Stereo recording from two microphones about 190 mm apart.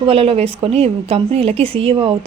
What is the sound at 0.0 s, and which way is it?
A woman's voice, 30° right (ahead or behind).